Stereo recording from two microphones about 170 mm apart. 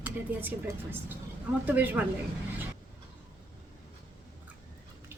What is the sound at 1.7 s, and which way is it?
Speech, 10° right (ahead or behind).